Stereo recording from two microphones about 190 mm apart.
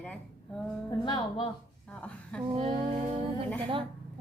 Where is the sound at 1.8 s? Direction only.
5° left (ahead or behind).